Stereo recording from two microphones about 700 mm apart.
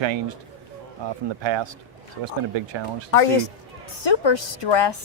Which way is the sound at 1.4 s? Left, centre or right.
Right.